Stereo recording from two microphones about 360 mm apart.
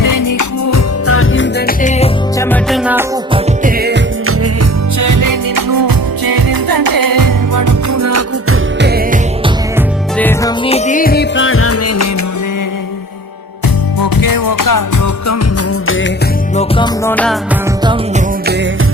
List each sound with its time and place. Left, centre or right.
0.0 s music: left
1.0 s music: left; by 2.0 s centre
2.4 s music: centre
3.6 s music: right
4.9 s music: right
10.2 s music: centre
10.7 s music: centre; by 12.0 s left
14.0 s music: left
16.6 s music: centre